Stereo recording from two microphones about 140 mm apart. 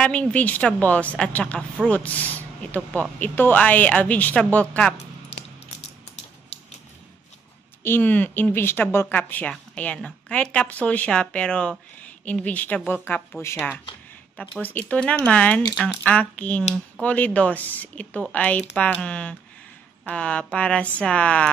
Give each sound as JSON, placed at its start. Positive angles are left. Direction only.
{"t": 0.0, "sound": "a woman's voice", "side_deg": 10}
{"t": 7.8, "sound": "a woman's voice", "side_deg": 15}